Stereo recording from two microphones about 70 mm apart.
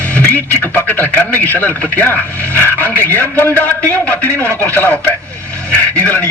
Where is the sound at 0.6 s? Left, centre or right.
Left.